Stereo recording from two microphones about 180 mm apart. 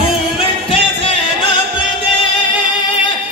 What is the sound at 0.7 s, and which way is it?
Music, 30° left (ahead or behind).